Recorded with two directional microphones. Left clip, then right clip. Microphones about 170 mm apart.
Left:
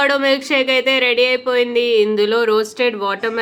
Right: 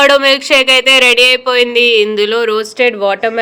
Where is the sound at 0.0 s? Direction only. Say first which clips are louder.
Right 7 dB; 25° right (ahead or behind).